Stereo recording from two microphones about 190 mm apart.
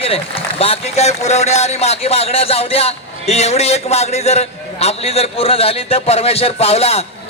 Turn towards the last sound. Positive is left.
turn(degrees=30)  # may be behind; listen again after turning